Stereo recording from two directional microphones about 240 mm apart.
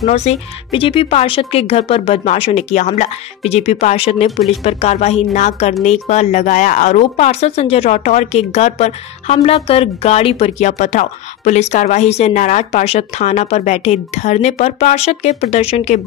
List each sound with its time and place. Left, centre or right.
0.0 s speech: left